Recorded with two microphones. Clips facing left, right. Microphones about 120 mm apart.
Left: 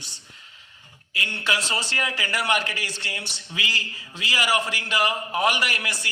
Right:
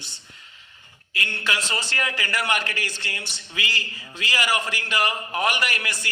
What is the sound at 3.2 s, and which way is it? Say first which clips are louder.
Speech: right 1 dB; 30° left (ahead or behind).